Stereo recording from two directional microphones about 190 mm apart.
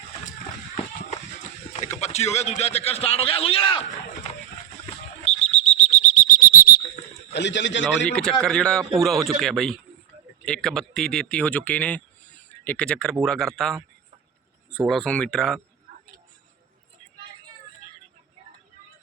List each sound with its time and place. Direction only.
2.0 s a man's voice: 35° left (ahead or behind)
5.2 s a sound: 35° left (ahead or behind); by 7.0 s 50° left (ahead or behind)
7.3 s a man's voice: 70° left (ahead or behind)
8.1 s speech: 5° left (ahead or behind)
14.8 s speech: 5° left (ahead or behind)